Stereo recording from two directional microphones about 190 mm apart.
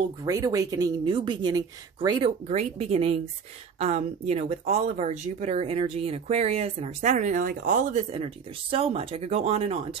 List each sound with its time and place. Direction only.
0.2 s speech: 20° right (ahead or behind)